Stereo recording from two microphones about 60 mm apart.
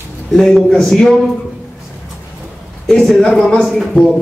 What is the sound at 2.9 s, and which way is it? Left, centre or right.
Speech, centre.